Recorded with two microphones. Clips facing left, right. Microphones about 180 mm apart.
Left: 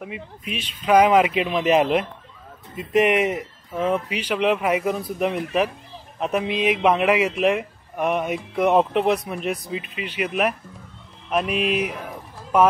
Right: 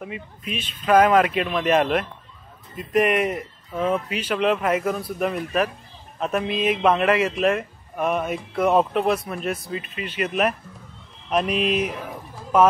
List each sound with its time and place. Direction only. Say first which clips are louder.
0.6 s speech: left 1 dB; 15° left (ahead or behind)
3.2 s speech: left 1 dB; 20° left (ahead or behind)
4.9 s speech: left 1 dB; 20° left (ahead or behind)